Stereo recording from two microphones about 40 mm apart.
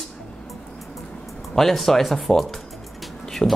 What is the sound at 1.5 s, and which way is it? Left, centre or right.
Speech, centre.